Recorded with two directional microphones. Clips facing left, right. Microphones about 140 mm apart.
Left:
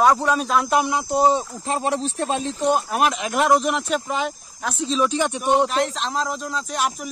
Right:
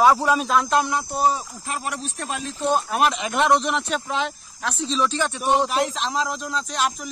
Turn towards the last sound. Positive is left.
turn(degrees=10)  # may be behind; listen again after turning